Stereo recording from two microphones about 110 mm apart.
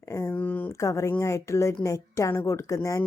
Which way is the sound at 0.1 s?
25° left (ahead or behind).